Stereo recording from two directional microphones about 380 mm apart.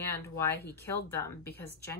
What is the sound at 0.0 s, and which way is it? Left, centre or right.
A woman's voice, centre.